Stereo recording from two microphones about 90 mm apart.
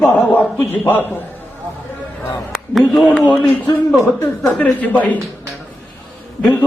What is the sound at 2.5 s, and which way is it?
Speech, centre (ahead or behind).